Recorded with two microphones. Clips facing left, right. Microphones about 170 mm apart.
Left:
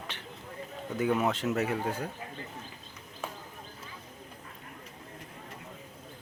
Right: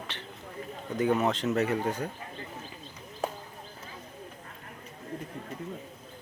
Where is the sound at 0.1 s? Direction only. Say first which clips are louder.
Right 3 dB; 10° left (ahead or behind).